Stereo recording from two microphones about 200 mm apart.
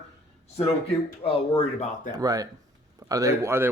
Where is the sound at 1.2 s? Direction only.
30° left (ahead or behind).